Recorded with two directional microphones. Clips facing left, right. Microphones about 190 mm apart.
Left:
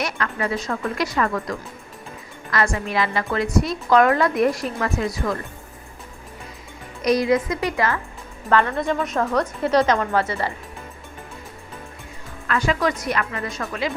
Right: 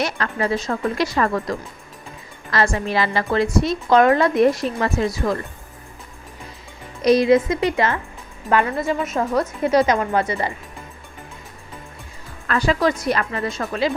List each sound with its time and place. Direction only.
0.0 s a woman's voice: 30° right (ahead or behind)
7.0 s a woman's voice: 25° right (ahead or behind)
8.4 s a woman's voice: 10° right (ahead or behind)
12.5 s a woman's voice: 35° right (ahead or behind)